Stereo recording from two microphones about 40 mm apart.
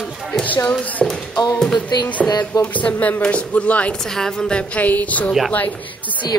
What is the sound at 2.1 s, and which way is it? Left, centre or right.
Speech, left.